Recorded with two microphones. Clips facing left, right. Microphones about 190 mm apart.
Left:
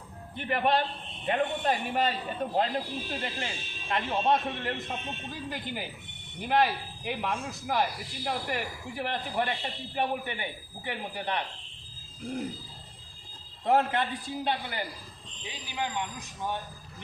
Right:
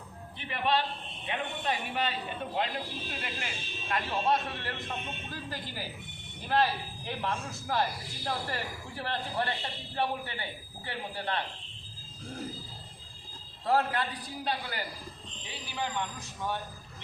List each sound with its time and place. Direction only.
0.3 s a man's voice: 50° left (ahead or behind); by 11.4 s 15° left (ahead or behind)
13.7 s speech: 20° left (ahead or behind)